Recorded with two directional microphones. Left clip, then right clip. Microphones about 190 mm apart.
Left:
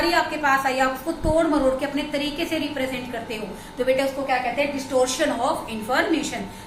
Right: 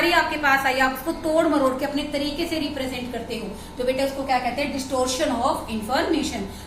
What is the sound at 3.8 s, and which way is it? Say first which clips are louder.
Speech: left 1 dB; centre (ahead or behind).